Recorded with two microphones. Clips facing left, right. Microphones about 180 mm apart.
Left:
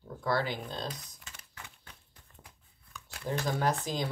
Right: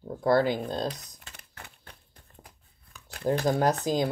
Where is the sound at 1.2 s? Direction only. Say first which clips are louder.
Right 2 dB; 60° right (ahead or behind).